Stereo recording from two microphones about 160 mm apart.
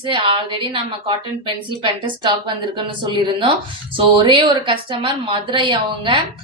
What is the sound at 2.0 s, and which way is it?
A woman's voice, 30° right (ahead or behind).